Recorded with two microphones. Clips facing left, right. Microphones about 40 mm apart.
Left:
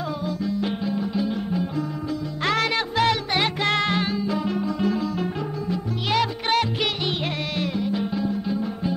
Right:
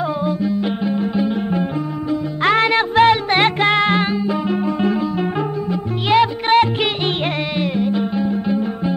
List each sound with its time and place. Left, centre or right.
0.2 s music: right
3.6 s music: right